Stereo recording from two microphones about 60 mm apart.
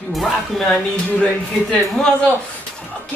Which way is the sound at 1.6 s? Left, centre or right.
Centre.